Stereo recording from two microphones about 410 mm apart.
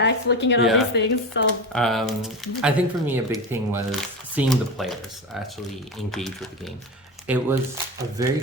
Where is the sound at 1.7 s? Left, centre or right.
Centre.